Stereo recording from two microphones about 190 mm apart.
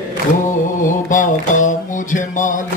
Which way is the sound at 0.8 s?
45° left (ahead or behind).